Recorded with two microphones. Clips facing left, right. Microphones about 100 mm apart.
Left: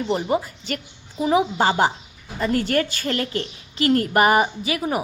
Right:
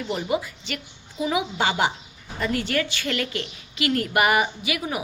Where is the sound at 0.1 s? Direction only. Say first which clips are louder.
Left 3 dB; 40° left (ahead or behind).